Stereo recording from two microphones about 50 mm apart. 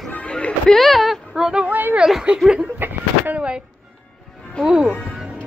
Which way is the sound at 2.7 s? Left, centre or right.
Right.